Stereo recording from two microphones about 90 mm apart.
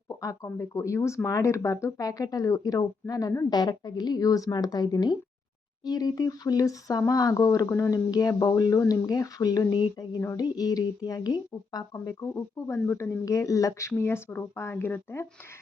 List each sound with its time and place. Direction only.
0.4 s speech: 25° left (ahead or behind)
8.1 s speech: 45° left (ahead or behind)
12.0 s speech: 30° left (ahead or behind)